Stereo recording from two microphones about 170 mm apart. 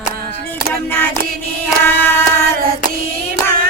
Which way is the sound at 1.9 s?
10° left (ahead or behind).